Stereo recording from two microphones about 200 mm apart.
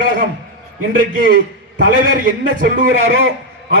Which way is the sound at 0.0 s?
45° right (ahead or behind).